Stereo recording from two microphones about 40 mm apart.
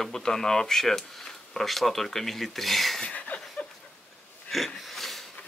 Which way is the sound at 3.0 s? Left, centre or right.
Left.